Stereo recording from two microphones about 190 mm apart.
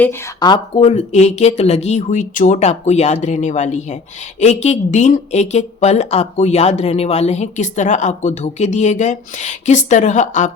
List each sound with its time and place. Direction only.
0.3 s speech: 20° left (ahead or behind)
0.8 s speech: 35° left (ahead or behind)